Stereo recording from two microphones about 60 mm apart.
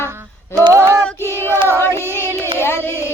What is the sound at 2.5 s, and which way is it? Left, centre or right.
Music, left.